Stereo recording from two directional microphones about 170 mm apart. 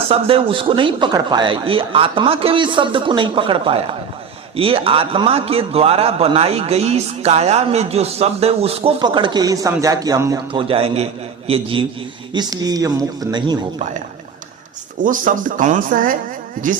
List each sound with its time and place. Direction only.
0.1 s a man's voice: 35° right (ahead or behind)
10.5 s a man's voice: 30° right (ahead or behind)
15.0 s speech: 50° right (ahead or behind)